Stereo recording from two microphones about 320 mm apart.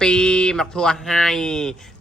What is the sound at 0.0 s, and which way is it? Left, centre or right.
Speech, centre.